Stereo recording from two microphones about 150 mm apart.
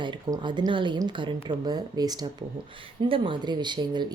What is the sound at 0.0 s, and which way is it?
Speech, 30° right (ahead or behind).